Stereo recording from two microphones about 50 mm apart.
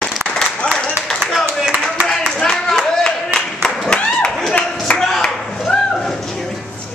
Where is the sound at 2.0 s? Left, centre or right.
Centre.